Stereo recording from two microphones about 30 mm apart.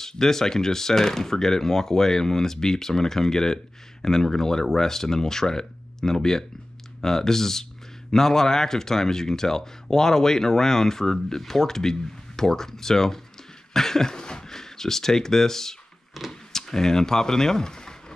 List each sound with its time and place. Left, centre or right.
0.0 s speech: centre
14.1 s speech: left